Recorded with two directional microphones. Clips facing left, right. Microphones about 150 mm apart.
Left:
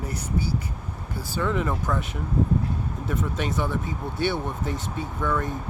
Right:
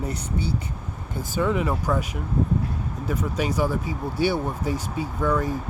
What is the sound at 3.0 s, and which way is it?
Speech, 5° right (ahead or behind).